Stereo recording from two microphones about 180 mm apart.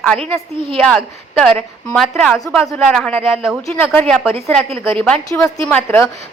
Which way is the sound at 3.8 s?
10° left (ahead or behind).